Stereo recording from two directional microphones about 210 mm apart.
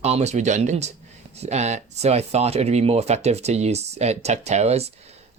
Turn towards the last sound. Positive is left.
turn(degrees=-30)  # may be behind; listen again after turning